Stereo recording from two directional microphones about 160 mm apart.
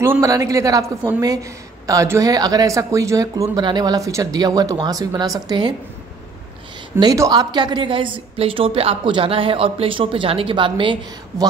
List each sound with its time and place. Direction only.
0.0 s a woman's voice: 20° right (ahead or behind)
7.0 s a woman's voice: 25° right (ahead or behind)